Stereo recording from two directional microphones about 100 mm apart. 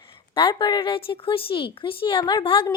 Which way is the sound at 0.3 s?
55° left (ahead or behind).